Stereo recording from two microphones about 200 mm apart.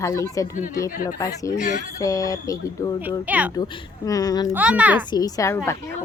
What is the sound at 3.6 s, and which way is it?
Speech, 20° left (ahead or behind).